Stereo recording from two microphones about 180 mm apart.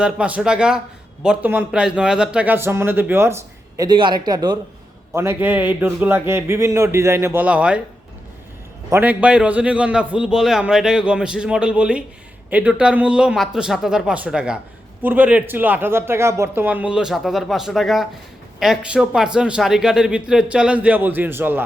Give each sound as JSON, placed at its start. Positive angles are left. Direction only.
{"t": 0.0, "sound": "a man's voice", "side_deg": -5}
{"t": 3.8, "sound": "a man's voice", "side_deg": -25}
{"t": 8.9, "sound": "a man's voice", "side_deg": -10}